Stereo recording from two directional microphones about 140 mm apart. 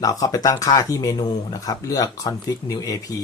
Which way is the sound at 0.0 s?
25° left (ahead or behind).